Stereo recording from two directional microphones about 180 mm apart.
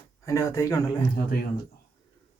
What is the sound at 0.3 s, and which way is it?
Speech, 15° left (ahead or behind).